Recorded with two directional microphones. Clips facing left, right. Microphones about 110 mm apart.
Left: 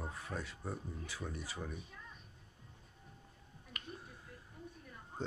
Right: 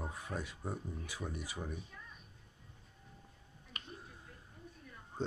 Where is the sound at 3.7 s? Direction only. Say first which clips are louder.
Left 1 dB; 25° right (ahead or behind).